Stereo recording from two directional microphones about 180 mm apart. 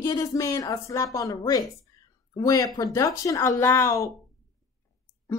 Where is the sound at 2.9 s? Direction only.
20° left (ahead or behind).